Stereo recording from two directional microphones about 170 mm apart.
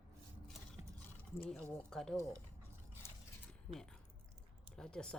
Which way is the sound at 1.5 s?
5° left (ahead or behind).